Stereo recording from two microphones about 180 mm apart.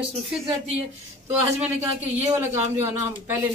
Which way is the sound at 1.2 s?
10° right (ahead or behind).